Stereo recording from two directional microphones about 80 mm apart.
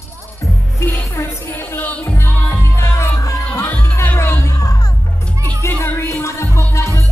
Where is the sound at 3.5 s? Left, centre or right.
Left.